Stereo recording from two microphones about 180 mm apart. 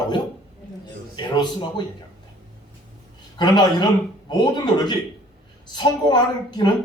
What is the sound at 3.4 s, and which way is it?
A man's voice, 25° left (ahead or behind).